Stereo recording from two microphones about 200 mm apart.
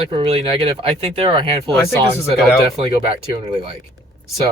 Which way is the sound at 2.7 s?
30° right (ahead or behind).